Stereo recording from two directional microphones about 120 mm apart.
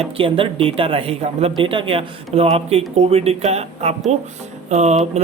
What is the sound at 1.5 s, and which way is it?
Speech, 45° right (ahead or behind).